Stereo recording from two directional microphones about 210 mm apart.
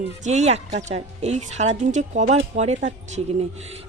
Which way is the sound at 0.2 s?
35° right (ahead or behind).